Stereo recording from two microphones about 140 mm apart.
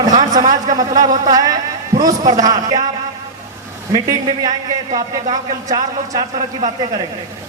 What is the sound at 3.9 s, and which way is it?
A man's voice, 30° right (ahead or behind).